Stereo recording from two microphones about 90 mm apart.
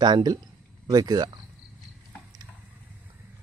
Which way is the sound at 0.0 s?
50° right (ahead or behind).